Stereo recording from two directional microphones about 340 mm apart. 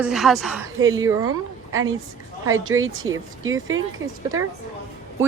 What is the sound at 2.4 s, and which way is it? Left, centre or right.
Speech, right.